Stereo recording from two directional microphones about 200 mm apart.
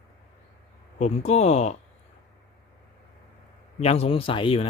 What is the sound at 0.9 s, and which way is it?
Speech, 35° left (ahead or behind).